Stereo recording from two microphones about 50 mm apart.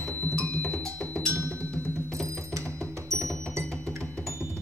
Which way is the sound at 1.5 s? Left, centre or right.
Left.